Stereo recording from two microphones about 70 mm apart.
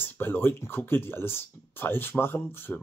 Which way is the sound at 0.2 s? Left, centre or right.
Left.